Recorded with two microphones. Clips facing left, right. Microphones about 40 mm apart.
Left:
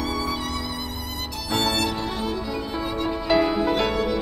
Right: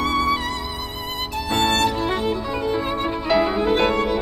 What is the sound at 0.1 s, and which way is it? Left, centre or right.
Music, right.